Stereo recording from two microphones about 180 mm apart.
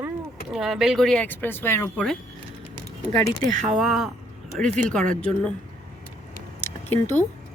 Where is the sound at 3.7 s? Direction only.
Centre (ahead or behind).